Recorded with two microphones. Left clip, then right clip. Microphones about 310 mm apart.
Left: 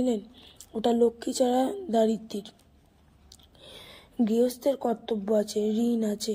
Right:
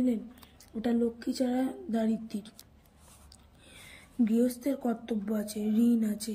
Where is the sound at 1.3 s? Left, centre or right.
Centre.